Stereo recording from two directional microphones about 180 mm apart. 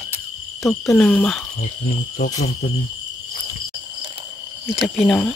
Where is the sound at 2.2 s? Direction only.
45° left (ahead or behind).